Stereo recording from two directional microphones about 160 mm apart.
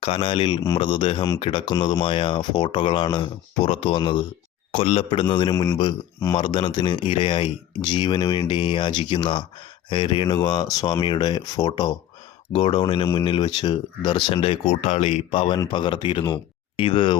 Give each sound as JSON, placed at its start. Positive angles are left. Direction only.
{"t": 0.0, "sound": "speech", "side_deg": 35}